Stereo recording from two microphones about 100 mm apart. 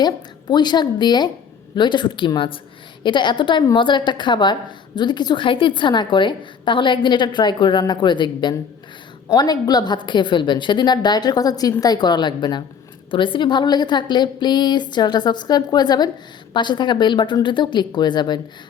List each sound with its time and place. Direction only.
0.0 s a woman's voice: 45° left (ahead or behind)